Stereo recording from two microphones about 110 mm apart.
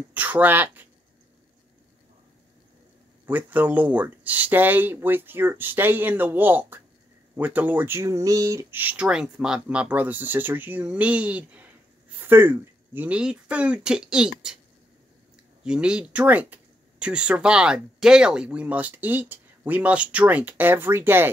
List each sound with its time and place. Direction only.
0.1 s speech: 15° right (ahead or behind)
3.3 s speech: 15° right (ahead or behind)
8.7 s speech: 15° right (ahead or behind)
15.6 s speech: 10° right (ahead or behind)